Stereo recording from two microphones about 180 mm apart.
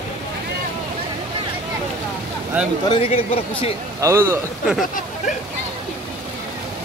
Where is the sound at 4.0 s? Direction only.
15° right (ahead or behind).